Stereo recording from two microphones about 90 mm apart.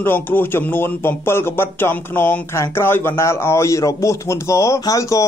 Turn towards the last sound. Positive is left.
turn(degrees=35)  # may be behind; listen again after turning